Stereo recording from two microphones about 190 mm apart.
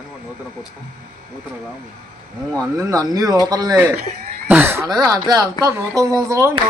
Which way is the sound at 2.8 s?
20° right (ahead or behind).